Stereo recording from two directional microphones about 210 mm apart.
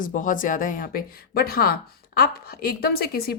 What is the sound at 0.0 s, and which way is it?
Speech, 40° left (ahead or behind).